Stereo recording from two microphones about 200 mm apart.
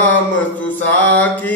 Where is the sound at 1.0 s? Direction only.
10° left (ahead or behind).